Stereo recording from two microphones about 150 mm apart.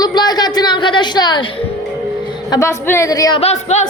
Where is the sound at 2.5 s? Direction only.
20° left (ahead or behind).